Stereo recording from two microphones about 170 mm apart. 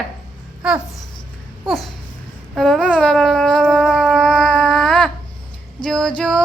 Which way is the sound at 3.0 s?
5° left (ahead or behind).